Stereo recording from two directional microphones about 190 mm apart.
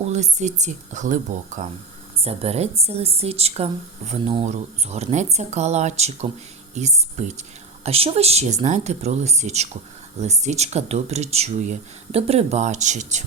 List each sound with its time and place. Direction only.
0.0 s speech: 35° right (ahead or behind)